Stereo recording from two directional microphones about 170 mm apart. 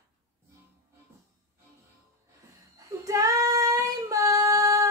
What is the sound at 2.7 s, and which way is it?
Child singing, 20° right (ahead or behind).